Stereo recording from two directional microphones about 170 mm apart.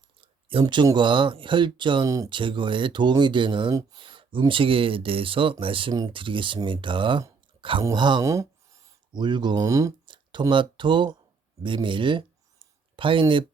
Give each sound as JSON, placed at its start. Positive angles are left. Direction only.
{"t": 0.2, "sound": "speech", "side_deg": -30}